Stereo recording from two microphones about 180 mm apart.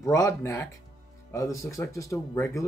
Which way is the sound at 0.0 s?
15° left (ahead or behind).